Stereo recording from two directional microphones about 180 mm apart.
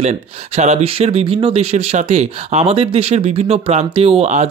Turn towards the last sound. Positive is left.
turn(degrees=-35)  # may be behind; listen again after turning